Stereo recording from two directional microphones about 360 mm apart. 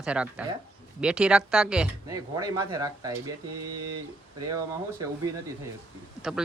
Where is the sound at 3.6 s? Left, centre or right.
Right.